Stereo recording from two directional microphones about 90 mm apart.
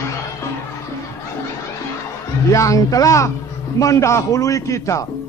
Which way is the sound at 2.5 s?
35° left (ahead or behind).